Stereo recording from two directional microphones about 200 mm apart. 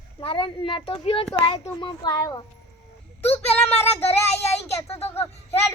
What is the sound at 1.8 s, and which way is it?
Speech, 20° left (ahead or behind).